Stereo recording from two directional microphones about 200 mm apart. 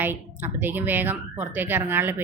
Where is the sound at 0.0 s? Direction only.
10° right (ahead or behind).